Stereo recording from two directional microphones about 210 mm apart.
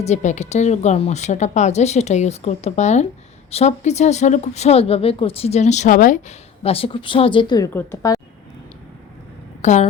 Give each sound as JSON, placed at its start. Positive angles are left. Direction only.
{"t": 0.0, "sound": "a woman's voice", "side_deg": 35}
{"t": 9.6, "sound": "speech", "side_deg": 35}